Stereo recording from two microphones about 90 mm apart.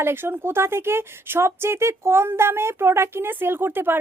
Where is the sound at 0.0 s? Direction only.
25° right (ahead or behind).